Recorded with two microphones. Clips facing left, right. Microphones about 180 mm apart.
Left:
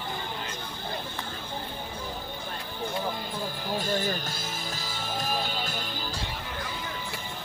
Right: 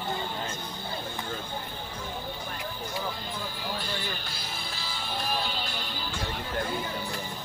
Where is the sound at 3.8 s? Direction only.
45° left (ahead or behind).